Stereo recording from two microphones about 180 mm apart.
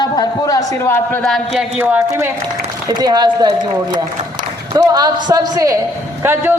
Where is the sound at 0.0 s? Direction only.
20° left (ahead or behind); by 1.6 s 5° left (ahead or behind).